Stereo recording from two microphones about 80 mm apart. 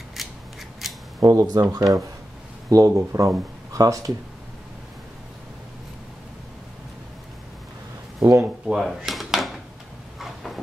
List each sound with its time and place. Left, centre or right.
0.2 s scissors: centre
1.2 s speech: right
8.2 s speech: right
8.6 s drawer open or close: centre
10.1 s a sound: centre